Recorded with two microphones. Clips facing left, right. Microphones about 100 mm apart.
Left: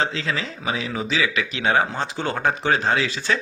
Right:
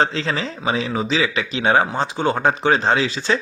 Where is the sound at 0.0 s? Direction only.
35° right (ahead or behind).